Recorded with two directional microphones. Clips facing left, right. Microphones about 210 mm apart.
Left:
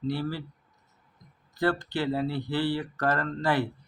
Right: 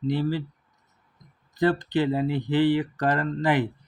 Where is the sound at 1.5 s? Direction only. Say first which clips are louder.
Right 5 dB; 20° right (ahead or behind).